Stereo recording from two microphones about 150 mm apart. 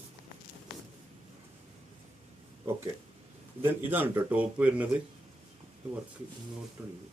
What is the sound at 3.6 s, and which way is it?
Speech, 15° right (ahead or behind).